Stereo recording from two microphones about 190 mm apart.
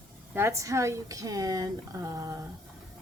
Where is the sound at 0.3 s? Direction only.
15° right (ahead or behind).